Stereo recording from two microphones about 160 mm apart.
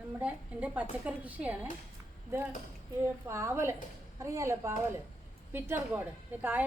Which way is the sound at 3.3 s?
15° right (ahead or behind).